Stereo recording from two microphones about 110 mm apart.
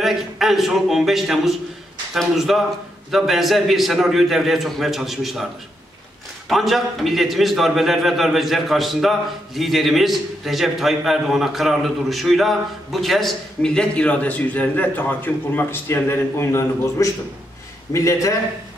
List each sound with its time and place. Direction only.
0.0 s a man's voice: centre (ahead or behind)
6.5 s a man's voice: centre (ahead or behind); by 18.4 s 30° left (ahead or behind)